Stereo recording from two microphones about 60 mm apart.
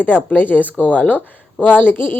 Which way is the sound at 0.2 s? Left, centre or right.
Left.